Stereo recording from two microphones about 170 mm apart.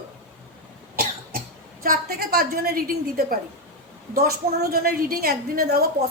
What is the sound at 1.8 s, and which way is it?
A woman's voice, 60° right (ahead or behind).